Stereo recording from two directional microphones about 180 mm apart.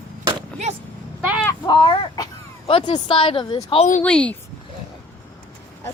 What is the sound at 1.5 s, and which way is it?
Speech, 25° left (ahead or behind).